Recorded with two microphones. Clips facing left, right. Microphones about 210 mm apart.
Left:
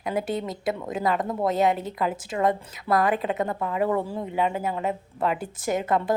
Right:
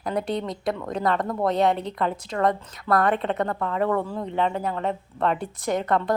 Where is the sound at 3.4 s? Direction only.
15° left (ahead or behind).